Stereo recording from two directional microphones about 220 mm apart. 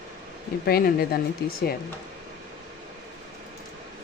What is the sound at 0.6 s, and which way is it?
Speech, 45° left (ahead or behind).